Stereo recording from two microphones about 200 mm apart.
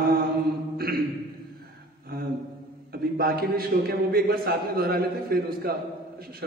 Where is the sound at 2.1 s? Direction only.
50° right (ahead or behind).